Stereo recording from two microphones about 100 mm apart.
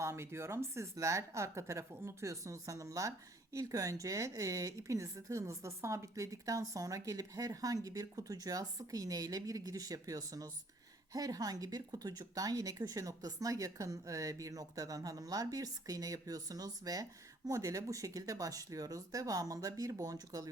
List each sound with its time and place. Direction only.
0.0 s speech: 25° right (ahead or behind)